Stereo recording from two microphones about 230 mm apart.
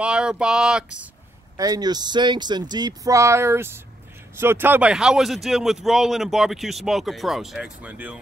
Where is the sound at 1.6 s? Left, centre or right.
Centre.